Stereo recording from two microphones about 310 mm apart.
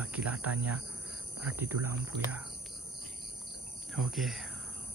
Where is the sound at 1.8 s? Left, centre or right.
Right.